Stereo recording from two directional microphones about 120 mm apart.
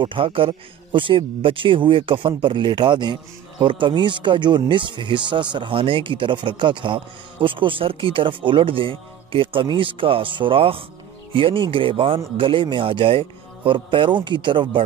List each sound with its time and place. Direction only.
0.0 s speech: 45° right (ahead or behind)